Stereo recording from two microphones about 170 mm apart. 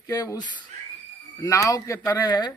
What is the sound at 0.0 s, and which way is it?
A man's voice, 20° left (ahead or behind).